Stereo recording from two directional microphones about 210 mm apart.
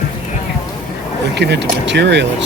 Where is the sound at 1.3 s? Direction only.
55° right (ahead or behind).